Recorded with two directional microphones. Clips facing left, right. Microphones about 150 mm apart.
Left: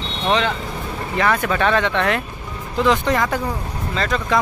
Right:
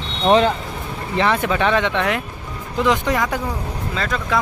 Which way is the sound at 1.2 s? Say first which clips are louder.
Right 1 dB; 20° right (ahead or behind).